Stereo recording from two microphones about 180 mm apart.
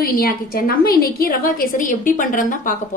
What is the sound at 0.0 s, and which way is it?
A woman's voice, 55° left (ahead or behind).